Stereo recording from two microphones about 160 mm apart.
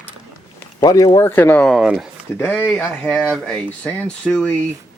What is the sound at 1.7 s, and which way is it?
Speech, centre (ahead or behind).